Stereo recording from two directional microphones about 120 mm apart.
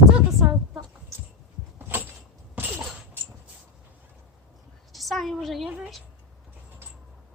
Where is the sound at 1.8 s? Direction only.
15° right (ahead or behind).